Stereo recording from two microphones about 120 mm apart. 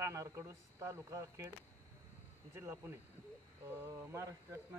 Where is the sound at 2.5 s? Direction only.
20° right (ahead or behind).